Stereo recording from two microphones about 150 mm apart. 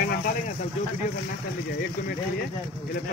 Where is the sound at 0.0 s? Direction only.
75° left (ahead or behind).